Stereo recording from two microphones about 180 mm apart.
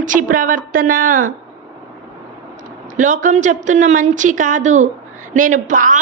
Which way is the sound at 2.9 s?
45° right (ahead or behind).